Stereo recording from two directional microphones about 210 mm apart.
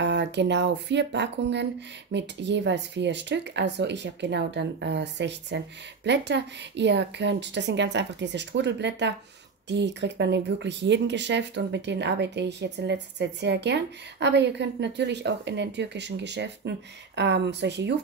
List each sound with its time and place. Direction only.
0.0 s speech: 55° right (ahead or behind)